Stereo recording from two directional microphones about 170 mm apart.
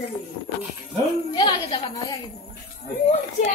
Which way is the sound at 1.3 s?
25° left (ahead or behind).